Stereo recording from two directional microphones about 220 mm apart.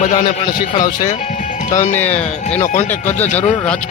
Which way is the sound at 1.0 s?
35° left (ahead or behind).